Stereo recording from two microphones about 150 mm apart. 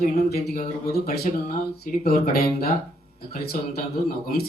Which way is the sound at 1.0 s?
75° left (ahead or behind).